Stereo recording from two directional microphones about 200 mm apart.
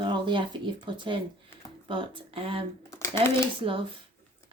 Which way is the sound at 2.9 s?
15° left (ahead or behind).